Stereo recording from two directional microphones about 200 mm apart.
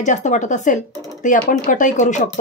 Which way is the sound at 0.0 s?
35° left (ahead or behind).